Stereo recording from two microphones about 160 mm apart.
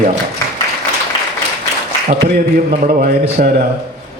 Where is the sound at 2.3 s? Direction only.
60° right (ahead or behind).